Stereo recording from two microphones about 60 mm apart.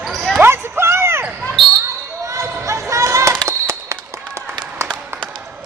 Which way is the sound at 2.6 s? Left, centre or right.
Right.